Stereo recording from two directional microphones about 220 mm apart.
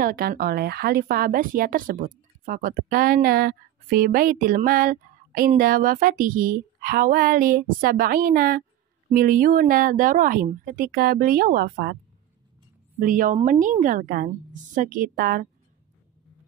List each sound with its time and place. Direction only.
0.0 s speech: 40° right (ahead or behind)
13.0 s speech: 40° right (ahead or behind)